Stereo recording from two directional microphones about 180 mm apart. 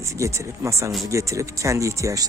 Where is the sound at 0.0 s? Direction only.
15° right (ahead or behind).